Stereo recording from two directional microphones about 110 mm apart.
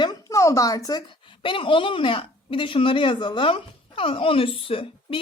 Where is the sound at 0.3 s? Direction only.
30° left (ahead or behind).